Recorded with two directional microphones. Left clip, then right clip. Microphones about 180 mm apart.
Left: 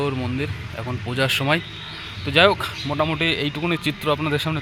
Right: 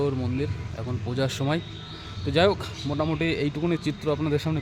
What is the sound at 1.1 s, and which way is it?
Speech, centre (ahead or behind).